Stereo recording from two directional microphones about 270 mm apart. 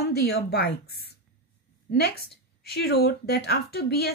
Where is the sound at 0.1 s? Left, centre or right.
Left.